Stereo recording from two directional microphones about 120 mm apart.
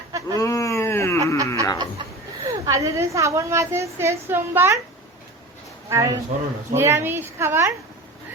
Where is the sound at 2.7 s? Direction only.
25° right (ahead or behind).